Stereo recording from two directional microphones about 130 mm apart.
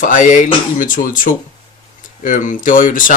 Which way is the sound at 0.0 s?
85° left.